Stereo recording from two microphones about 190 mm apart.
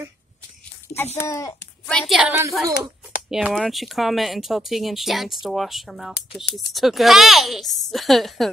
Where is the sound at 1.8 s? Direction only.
Centre (ahead or behind).